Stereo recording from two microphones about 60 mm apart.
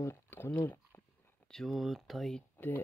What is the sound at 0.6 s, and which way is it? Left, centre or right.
Speech, left.